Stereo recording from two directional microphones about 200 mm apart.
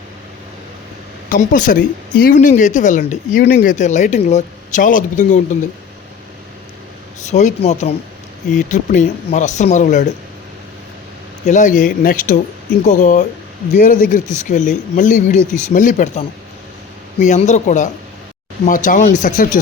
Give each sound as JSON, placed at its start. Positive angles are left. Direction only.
{"t": 1.3, "sound": "speech", "side_deg": 40}
{"t": 7.3, "sound": "speech", "side_deg": 35}
{"t": 11.4, "sound": "speech", "side_deg": 40}